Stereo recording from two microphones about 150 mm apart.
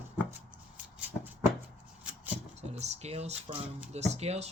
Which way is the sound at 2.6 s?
45° right (ahead or behind).